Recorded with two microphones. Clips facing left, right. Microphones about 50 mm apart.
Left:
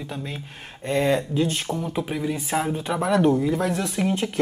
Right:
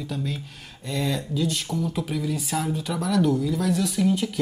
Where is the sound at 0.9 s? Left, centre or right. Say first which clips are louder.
Left 6 dB; left.